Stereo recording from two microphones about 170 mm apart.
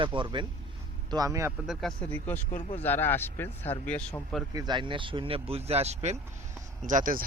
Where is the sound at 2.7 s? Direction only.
10° left (ahead or behind).